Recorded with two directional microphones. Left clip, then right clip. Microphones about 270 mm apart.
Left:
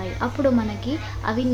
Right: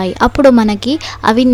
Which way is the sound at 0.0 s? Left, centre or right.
Right.